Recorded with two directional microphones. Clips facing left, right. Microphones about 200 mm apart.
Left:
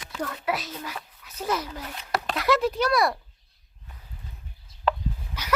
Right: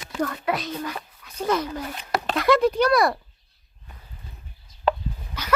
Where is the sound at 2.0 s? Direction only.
15° right (ahead or behind).